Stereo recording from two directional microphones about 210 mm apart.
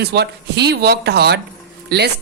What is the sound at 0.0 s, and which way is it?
Speech, 50° right (ahead or behind).